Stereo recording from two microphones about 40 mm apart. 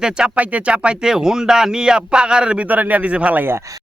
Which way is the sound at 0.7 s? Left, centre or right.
Right.